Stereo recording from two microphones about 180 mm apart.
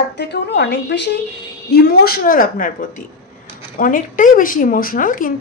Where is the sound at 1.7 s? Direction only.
60° left (ahead or behind).